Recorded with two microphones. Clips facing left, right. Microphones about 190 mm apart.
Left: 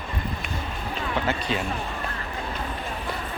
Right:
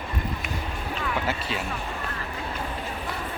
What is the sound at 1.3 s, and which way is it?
Speech, 5° right (ahead or behind).